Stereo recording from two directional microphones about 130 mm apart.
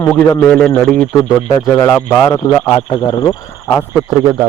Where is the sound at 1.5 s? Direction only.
20° left (ahead or behind).